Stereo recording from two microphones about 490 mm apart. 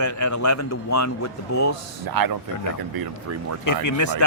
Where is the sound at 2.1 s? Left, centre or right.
Right.